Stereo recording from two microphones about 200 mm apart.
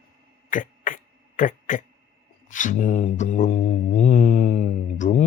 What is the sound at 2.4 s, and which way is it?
Mantra, 40° left (ahead or behind).